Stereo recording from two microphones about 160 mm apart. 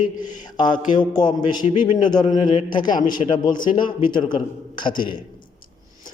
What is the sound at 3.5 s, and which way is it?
A man's voice, 25° left (ahead or behind).